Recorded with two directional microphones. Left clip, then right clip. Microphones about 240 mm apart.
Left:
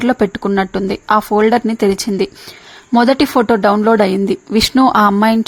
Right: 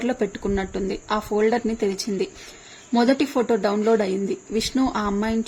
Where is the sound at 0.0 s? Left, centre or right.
Left.